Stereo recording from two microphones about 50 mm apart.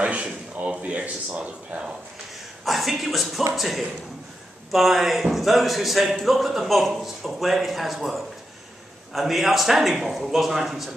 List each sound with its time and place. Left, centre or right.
0.0 s speech: right
2.6 s speech: centre